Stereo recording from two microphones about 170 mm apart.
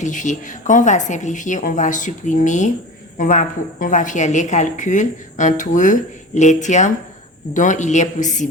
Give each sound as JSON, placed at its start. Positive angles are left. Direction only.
{"t": 0.0, "sound": "a woman's voice", "side_deg": 45}